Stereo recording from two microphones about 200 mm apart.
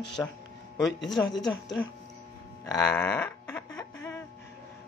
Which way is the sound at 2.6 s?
15° left (ahead or behind).